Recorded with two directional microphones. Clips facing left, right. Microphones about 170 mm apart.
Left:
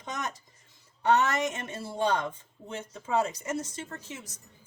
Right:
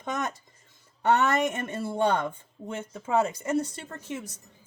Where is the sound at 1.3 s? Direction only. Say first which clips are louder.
Right 4 dB; 60° right (ahead or behind).